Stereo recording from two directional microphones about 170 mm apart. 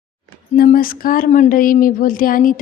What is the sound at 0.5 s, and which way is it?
A woman's voice, 60° left (ahead or behind).